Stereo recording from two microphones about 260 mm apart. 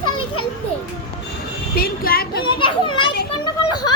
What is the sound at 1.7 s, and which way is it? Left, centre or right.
Speech, left.